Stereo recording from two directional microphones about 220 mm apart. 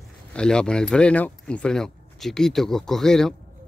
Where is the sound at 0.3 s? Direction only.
5° left (ahead or behind).